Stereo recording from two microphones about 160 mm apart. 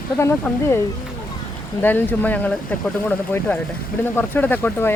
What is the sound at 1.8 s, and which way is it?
Speech, 10° left (ahead or behind).